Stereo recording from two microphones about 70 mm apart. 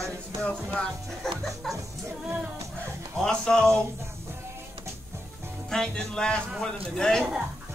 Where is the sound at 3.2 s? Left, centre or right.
Centre.